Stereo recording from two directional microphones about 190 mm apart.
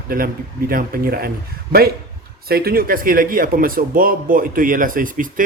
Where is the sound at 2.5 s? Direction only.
50° right (ahead or behind).